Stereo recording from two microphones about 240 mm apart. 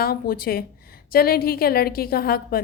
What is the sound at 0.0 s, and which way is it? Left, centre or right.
A woman's voice, left.